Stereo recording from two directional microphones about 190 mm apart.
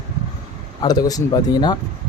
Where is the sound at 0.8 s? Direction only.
20° left (ahead or behind).